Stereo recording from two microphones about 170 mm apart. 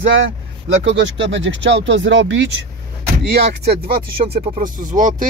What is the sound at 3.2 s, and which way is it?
Speech, 70° right (ahead or behind).